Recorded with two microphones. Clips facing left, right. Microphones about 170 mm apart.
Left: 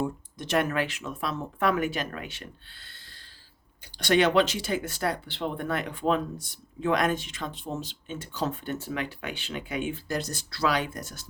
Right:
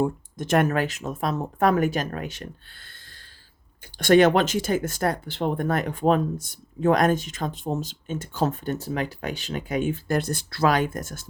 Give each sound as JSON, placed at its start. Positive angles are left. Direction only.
{"t": 0.0, "sound": "speech", "side_deg": -50}